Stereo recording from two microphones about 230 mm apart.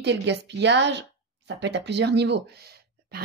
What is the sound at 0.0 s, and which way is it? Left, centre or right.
Speech, right.